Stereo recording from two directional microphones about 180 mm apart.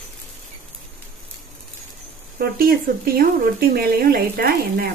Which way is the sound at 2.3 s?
55° right (ahead or behind).